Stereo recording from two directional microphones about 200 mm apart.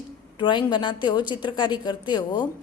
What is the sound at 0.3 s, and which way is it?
A woman's voice, 25° left (ahead or behind).